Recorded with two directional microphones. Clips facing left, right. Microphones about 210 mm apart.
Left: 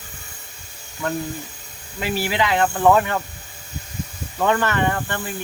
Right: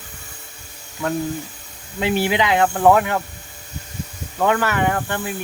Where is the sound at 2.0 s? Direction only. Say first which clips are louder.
Right 3 dB; 20° right (ahead or behind).